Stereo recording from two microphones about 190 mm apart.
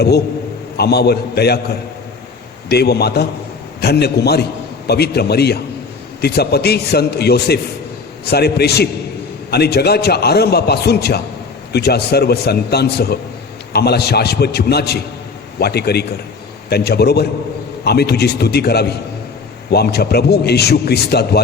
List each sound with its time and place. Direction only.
0.8 s a man's voice: 55° left (ahead or behind)